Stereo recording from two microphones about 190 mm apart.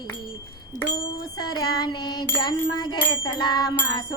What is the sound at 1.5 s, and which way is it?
Music, 25° left (ahead or behind).